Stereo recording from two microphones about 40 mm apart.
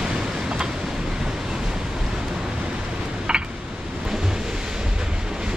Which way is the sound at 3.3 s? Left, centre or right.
Right.